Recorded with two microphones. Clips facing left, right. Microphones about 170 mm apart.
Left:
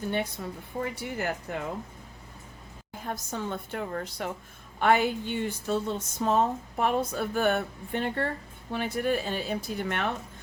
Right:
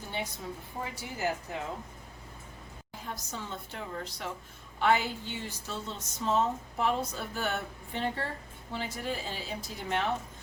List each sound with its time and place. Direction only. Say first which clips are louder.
0.8 s a woman's voice: left 4 dB; 60° left (ahead or behind)
3.0 s a woman's voice: left 7 dB; 50° left (ahead or behind)